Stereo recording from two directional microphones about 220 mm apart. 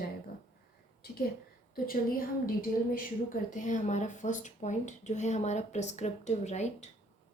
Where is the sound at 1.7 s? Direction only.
40° left (ahead or behind).